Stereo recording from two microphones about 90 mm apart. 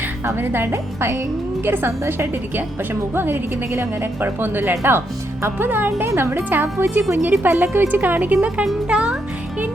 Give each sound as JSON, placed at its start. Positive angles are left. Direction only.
{"t": 0.3, "sound": "a woman's voice", "side_deg": -25}